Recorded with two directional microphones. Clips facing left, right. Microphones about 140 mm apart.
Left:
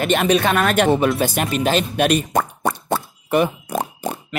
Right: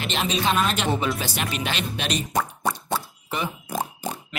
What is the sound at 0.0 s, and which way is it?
Speech, 55° left (ahead or behind).